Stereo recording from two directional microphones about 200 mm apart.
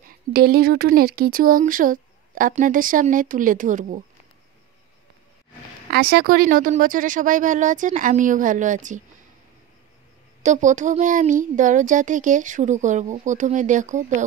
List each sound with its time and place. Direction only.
0.3 s speech: 50° right (ahead or behind)
5.9 s speech: 50° right (ahead or behind)
10.4 s speech: 40° right (ahead or behind)